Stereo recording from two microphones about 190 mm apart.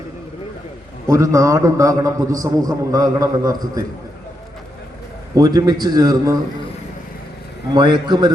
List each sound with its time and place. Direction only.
1.0 s a man's voice: 15° right (ahead or behind)
5.3 s a man's voice: 20° right (ahead or behind)
7.7 s a man's voice: 25° right (ahead or behind)